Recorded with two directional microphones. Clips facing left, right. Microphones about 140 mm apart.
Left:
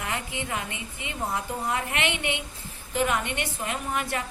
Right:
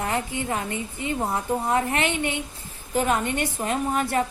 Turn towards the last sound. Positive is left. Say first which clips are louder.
# right 6 dB
turn(degrees=-35)  # may be behind; listen again after turning